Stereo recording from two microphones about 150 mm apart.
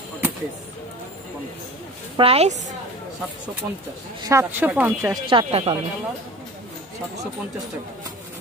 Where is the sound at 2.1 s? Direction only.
40° right (ahead or behind).